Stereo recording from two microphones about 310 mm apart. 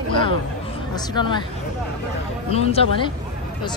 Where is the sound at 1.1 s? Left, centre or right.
Centre.